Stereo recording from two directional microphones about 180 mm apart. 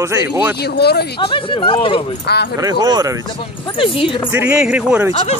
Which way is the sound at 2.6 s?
20° right (ahead or behind).